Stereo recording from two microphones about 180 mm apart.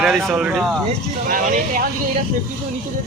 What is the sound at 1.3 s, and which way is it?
Speech, 50° right (ahead or behind).